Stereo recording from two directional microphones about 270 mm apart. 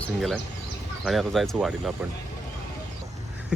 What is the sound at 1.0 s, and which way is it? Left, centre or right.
Speech, centre.